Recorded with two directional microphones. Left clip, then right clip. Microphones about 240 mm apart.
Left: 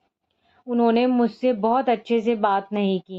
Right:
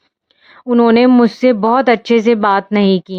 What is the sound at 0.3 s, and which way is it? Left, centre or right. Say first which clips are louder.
Speech: right 12 dB; right.